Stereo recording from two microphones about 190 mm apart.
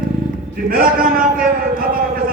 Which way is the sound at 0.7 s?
50° right (ahead or behind).